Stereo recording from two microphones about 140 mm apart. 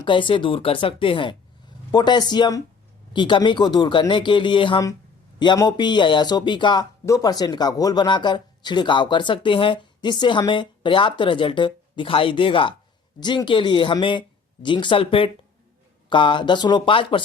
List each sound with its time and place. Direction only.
0.0 s speech: 35° left (ahead or behind)